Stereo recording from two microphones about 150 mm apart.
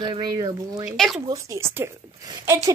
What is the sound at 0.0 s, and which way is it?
Speech, 30° right (ahead or behind).